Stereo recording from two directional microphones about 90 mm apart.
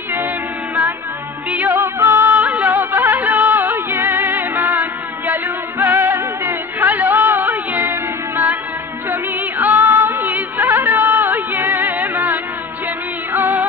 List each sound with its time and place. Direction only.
1.7 s music: 30° right (ahead or behind)